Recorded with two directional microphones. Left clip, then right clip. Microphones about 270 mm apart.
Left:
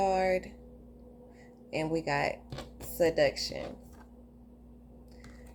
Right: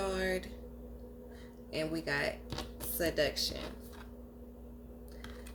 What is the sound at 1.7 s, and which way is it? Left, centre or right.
Speech, centre.